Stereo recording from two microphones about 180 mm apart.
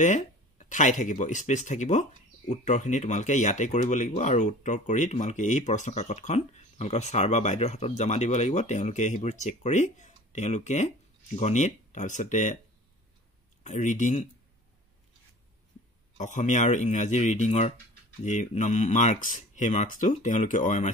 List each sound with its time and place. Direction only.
0.0 s speech: 40° left (ahead or behind)
13.7 s speech: 45° left (ahead or behind)
16.2 s speech: 40° left (ahead or behind)